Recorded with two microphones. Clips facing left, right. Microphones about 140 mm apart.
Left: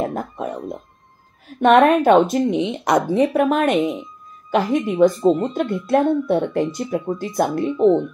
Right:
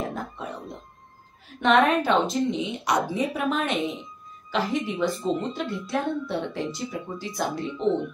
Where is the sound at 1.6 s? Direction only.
50° left (ahead or behind).